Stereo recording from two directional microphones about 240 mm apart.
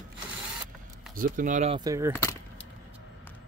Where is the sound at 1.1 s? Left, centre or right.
Right.